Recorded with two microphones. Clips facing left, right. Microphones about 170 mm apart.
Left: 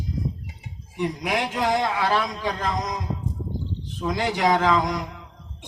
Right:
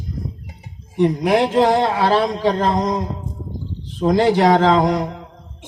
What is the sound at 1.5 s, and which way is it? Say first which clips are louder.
Speech: right 8 dB; 40° right (ahead or behind).